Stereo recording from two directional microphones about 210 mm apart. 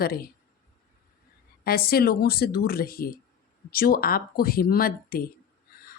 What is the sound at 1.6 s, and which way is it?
Speech, 45° left (ahead or behind).